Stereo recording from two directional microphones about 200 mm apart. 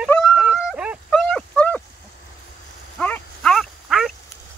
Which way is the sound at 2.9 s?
5° left (ahead or behind).